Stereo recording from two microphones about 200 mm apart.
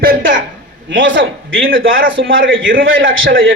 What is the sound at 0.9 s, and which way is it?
A man's voice, 70° right (ahead or behind).